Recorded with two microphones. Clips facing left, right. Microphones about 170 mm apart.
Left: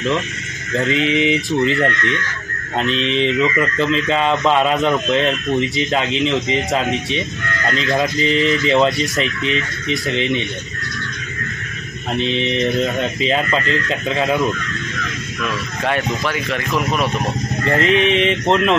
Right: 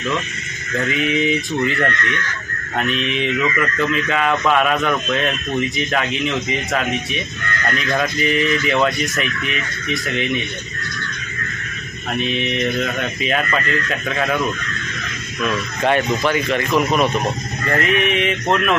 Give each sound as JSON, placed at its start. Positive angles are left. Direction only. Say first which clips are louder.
{"t": 0.8, "sound": "speech", "louder": "left 2 dB", "side_deg": 25}
{"t": 12.1, "sound": "speech", "louder": "left 2 dB", "side_deg": 25}
{"t": 15.4, "sound": "speech", "louder": "right 3 dB", "side_deg": 0}
{"t": 17.6, "sound": "speech", "louder": "left 3 dB", "side_deg": 25}